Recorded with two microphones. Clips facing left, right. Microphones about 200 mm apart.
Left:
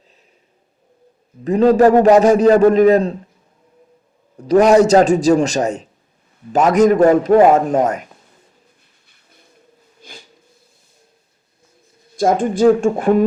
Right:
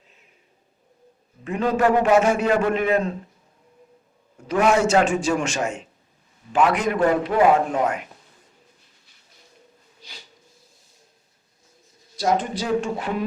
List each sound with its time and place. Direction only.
1.5 s a man's voice: 35° left (ahead or behind)
4.4 s a man's voice: 40° left (ahead or behind)
9.0 s bird: 55° left (ahead or behind)
10.0 s a sound: 50° left (ahead or behind)
12.1 s a man's voice: 50° left (ahead or behind)